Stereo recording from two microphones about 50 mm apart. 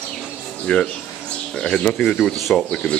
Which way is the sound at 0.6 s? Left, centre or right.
Left.